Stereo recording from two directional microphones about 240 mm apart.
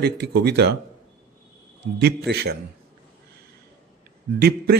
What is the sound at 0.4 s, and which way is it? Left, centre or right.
Speech, right.